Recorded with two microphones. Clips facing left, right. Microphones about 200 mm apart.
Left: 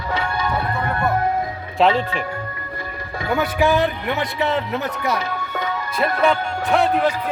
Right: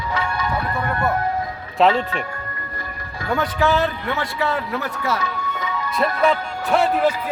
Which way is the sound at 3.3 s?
10° left (ahead or behind).